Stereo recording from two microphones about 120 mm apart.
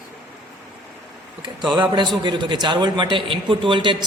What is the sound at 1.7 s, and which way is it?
A man's voice, 40° right (ahead or behind).